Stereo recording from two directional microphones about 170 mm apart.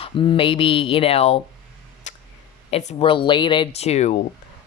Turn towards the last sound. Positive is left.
turn(degrees=40)  # may be behind; listen again after turning